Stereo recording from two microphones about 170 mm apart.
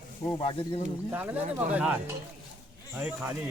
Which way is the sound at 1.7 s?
10° right (ahead or behind).